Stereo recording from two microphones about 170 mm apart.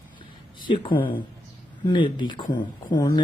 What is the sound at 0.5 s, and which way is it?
Speech, 30° left (ahead or behind).